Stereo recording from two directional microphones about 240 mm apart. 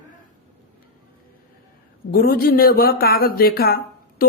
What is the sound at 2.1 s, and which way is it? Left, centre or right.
Speech, left.